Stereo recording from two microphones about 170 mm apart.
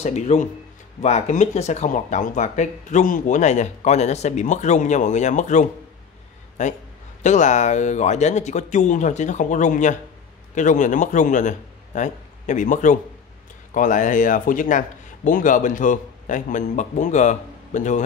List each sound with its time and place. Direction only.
0.0 s a man's voice: 40° left (ahead or behind)